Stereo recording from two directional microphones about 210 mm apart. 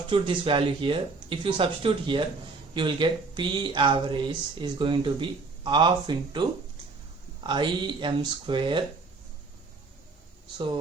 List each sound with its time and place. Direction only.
0.1 s speech: 25° right (ahead or behind)